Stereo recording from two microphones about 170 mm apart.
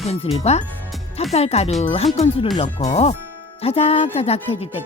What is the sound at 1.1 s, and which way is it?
Speech, 35° left (ahead or behind).